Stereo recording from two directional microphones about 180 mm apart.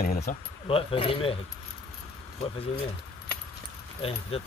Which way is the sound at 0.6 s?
30° left (ahead or behind).